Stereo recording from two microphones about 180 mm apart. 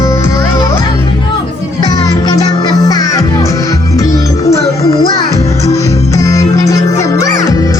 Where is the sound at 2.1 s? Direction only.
20° left (ahead or behind).